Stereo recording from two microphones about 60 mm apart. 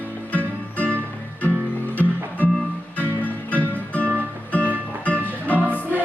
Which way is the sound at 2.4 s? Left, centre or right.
Left.